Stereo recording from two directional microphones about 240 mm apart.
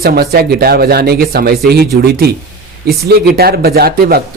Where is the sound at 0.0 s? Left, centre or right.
Right.